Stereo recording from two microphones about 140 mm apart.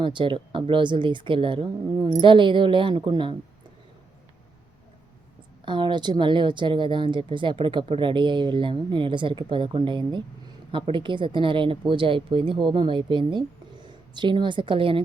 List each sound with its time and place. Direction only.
0.0 s a woman's voice: 35° right (ahead or behind)
5.6 s a woman's voice: 35° right (ahead or behind)